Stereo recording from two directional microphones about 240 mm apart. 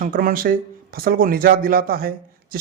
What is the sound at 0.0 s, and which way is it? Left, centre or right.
Speech, right.